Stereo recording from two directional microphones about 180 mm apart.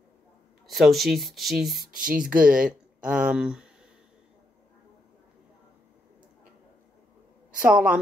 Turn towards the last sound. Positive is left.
turn(degrees=-5)  # may be behind; listen again after turning